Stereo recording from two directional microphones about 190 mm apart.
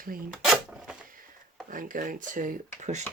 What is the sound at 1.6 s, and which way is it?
Speech, 45° right (ahead or behind).